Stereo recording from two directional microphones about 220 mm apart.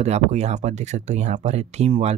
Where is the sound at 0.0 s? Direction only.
30° right (ahead or behind).